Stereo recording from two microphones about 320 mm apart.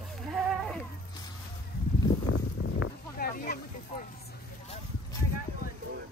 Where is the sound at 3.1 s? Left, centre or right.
Left.